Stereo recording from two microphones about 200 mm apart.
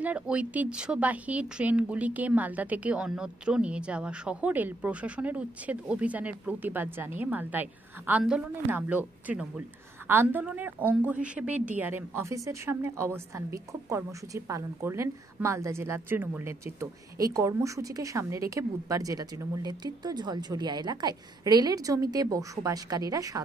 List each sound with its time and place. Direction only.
0.0 s a woman's voice: 5° right (ahead or behind)